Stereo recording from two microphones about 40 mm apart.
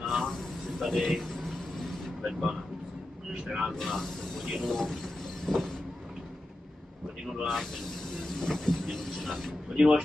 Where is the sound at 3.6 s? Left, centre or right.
Centre.